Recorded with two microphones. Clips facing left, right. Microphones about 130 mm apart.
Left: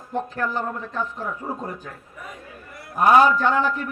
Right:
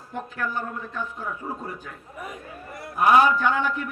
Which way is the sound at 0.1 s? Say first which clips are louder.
Left 5 dB; 35° left (ahead or behind).